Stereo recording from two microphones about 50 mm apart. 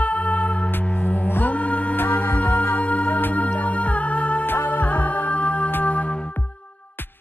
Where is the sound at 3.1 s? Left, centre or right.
Left.